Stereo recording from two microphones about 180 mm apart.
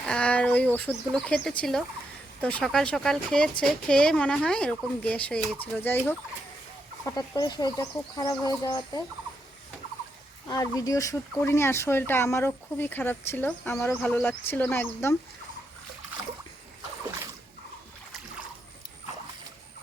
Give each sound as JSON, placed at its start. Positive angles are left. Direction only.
{"t": 0.0, "sound": "a woman's voice", "side_deg": 5}
{"t": 10.5, "sound": "speech", "side_deg": 20}